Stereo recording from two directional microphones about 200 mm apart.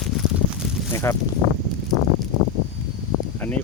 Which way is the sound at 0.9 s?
15° left (ahead or behind).